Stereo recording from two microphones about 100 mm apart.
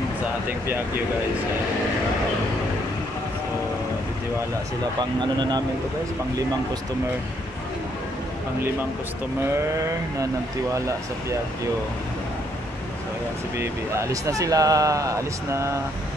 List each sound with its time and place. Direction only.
0.5 s speech: 20° right (ahead or behind)
13.6 s speech: 30° right (ahead or behind)